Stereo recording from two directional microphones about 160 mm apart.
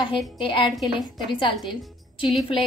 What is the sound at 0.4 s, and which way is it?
A woman's voice, 30° left (ahead or behind).